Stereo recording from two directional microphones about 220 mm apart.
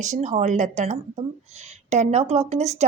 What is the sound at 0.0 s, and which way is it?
A woman's voice, 35° right (ahead or behind).